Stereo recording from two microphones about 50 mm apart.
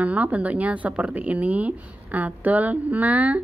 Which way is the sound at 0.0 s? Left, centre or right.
Right.